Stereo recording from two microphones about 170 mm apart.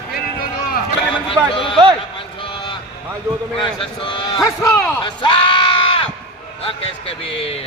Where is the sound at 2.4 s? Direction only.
30° left (ahead or behind).